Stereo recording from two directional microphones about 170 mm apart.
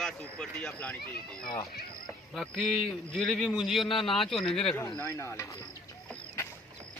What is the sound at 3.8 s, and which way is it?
Speech, 30° left (ahead or behind).